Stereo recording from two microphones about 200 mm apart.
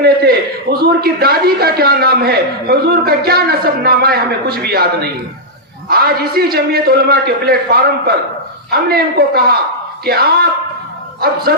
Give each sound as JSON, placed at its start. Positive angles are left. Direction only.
{"t": 0.0, "sound": "a man's voice", "side_deg": -50}
{"t": 5.9, "sound": "a man's voice", "side_deg": -50}